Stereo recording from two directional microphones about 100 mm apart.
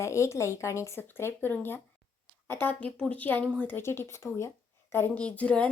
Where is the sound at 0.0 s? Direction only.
30° left (ahead or behind).